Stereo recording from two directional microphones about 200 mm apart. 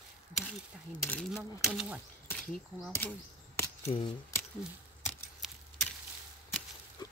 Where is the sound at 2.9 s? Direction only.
10° left (ahead or behind).